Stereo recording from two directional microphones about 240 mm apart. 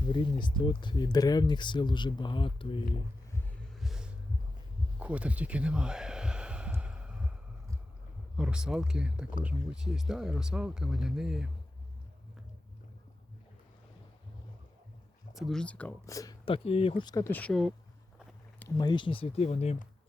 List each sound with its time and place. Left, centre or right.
0.4 s speech: centre
3.8 s a sound: centre
8.4 s speech: centre
15.4 s speech: centre
18.6 s speech: centre